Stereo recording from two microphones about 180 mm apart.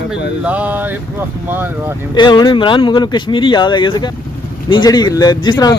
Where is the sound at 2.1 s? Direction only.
25° left (ahead or behind).